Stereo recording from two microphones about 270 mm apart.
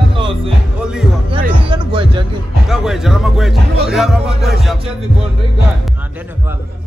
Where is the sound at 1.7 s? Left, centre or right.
Centre.